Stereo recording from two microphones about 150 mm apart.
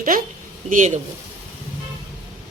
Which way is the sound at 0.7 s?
55° right (ahead or behind).